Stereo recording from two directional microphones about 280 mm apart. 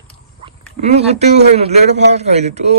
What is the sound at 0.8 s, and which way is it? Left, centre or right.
A man's voice, right.